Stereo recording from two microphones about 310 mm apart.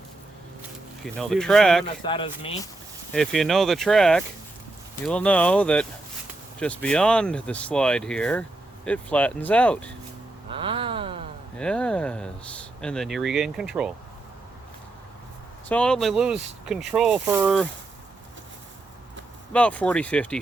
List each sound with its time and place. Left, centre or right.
1.0 s speech: centre
2.0 s speech: centre
3.1 s speech: centre
10.5 s a sound: centre
11.5 s speech: centre
15.7 s speech: centre
19.5 s speech: centre